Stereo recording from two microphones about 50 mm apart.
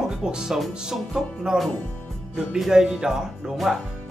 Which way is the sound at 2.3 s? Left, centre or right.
Centre.